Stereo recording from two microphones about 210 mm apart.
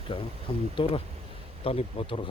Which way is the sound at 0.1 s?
25° left (ahead or behind).